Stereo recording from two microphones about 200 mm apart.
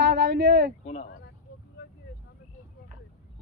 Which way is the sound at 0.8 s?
35° left (ahead or behind).